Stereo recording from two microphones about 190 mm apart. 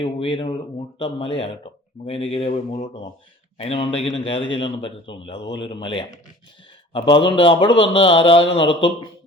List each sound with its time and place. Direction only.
0.0 s a man's voice: 25° left (ahead or behind)